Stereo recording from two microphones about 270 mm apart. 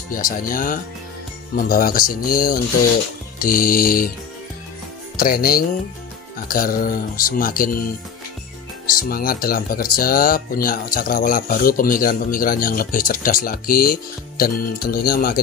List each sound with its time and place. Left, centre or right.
0.1 s speech: left
5.1 s speech: left
9.1 s speech: left